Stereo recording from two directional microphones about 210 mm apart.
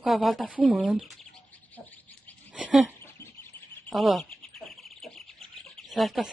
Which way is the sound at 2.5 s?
5° right (ahead or behind).